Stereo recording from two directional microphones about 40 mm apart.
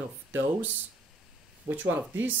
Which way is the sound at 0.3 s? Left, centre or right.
Right.